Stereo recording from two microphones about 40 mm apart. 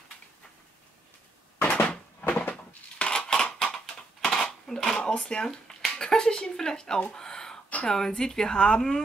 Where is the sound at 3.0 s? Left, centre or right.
Left.